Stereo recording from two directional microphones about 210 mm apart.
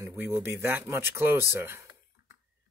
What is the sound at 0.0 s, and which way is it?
Speech, 10° right (ahead or behind).